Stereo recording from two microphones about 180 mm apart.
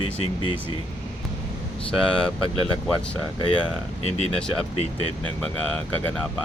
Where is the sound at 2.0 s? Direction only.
5° left (ahead or behind).